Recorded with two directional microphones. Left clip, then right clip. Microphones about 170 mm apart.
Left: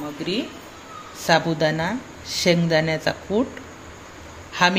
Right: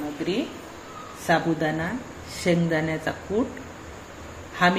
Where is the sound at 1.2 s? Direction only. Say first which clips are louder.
Left 4 dB; 65° left (ahead or behind).